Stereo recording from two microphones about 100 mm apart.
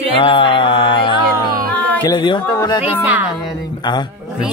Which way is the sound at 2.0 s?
50° left (ahead or behind).